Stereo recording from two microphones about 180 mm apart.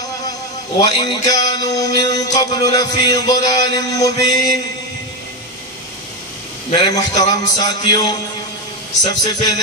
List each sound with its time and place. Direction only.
0.3 s a sound: 20° left (ahead or behind)
1.3 s music: 20° left (ahead or behind)
6.7 s music: 20° left (ahead or behind)